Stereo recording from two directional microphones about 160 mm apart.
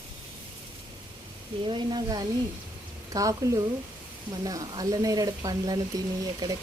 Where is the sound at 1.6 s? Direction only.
30° right (ahead or behind).